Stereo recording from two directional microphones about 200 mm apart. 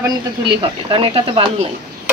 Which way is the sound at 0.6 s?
25° right (ahead or behind).